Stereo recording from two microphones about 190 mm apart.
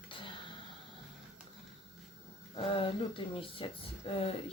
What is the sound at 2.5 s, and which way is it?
Speech, 30° left (ahead or behind).